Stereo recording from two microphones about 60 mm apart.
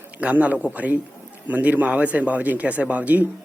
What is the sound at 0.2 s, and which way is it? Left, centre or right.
Speech, right.